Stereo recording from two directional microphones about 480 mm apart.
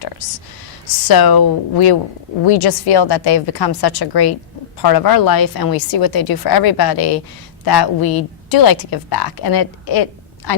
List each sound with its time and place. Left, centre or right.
1.0 s a woman's voice: left